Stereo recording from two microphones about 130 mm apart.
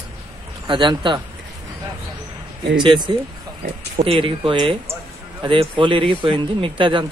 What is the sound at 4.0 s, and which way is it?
A man's voice, 45° right (ahead or behind).